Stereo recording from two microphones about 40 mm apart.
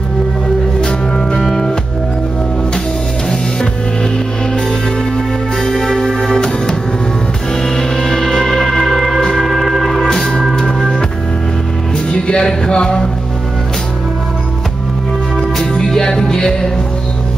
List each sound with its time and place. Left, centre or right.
0.7 s music: left
5.6 s music: centre
9.4 s organ: centre
10.1 s music: centre
12.1 s music: left
15.6 s music: centre